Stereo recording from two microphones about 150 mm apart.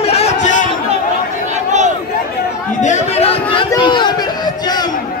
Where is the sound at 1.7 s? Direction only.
55° right (ahead or behind).